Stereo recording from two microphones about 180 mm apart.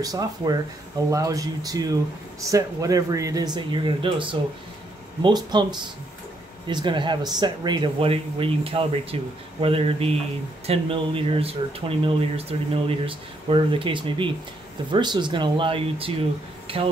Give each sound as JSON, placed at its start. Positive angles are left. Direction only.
{"t": 0.0, "sound": "speech", "side_deg": -20}